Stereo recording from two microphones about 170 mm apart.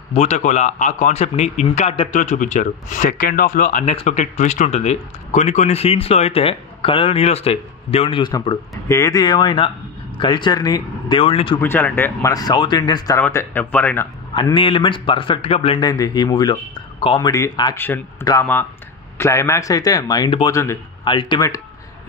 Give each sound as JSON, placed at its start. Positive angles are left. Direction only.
{"t": 0.1, "sound": "a man's voice", "side_deg": 40}
{"t": 8.3, "sound": "speech", "side_deg": 20}
{"t": 11.6, "sound": "speech", "side_deg": 10}
{"t": 14.3, "sound": "speech", "side_deg": 30}
{"t": 15.8, "sound": "speech", "side_deg": 20}
{"t": 17.7, "sound": "speech", "side_deg": 10}